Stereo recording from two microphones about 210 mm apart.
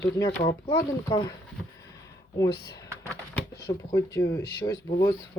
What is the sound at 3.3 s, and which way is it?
Speech, 15° left (ahead or behind).